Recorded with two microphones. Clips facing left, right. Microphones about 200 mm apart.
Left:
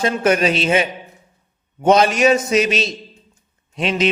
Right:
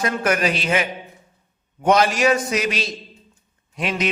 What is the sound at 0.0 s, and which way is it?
A man's voice, 25° left (ahead or behind).